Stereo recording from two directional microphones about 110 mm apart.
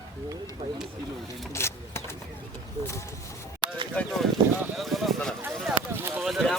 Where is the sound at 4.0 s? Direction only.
10° left (ahead or behind).